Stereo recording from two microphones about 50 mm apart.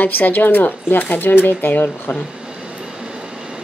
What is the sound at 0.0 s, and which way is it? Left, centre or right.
Speech, left.